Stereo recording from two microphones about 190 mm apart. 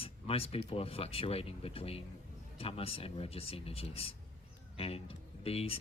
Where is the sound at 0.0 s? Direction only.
30° left (ahead or behind).